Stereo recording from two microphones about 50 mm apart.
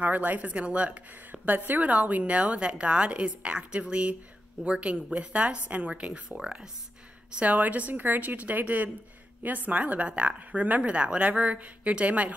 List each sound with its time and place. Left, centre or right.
0.0 s speech: right; by 6.7 s centre
7.2 s a woman's voice: right